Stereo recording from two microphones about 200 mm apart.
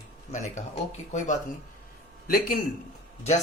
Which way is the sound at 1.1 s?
35° left (ahead or behind).